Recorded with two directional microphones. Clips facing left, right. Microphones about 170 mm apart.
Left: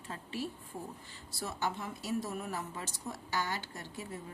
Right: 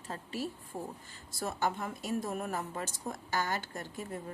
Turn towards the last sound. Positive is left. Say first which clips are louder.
# right 3 dB
turn(degrees=-50)  # may be behind; listen again after turning